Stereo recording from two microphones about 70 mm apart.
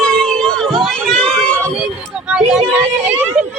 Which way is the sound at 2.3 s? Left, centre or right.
Centre.